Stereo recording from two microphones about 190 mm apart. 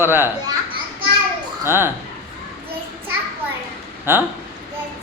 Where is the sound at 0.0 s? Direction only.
10° right (ahead or behind).